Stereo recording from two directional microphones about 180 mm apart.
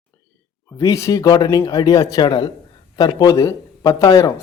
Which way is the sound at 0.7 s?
20° left (ahead or behind).